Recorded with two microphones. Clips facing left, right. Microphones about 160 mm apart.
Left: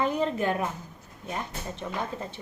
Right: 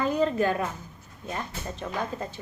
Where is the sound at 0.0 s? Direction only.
20° left (ahead or behind).